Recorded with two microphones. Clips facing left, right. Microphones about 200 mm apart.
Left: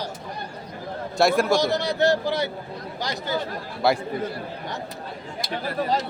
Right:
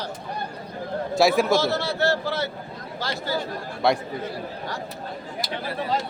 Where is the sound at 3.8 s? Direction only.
Centre (ahead or behind).